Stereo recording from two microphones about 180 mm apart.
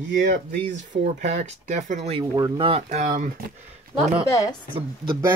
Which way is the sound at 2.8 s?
40° right (ahead or behind).